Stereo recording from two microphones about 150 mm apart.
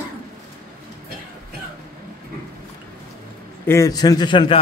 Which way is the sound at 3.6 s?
20° left (ahead or behind).